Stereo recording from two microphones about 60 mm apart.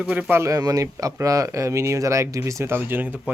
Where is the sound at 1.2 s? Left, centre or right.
Right.